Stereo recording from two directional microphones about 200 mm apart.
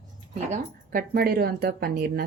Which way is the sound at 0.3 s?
40° right (ahead or behind).